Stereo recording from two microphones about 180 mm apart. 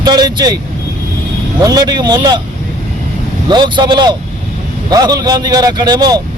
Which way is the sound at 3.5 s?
25° right (ahead or behind).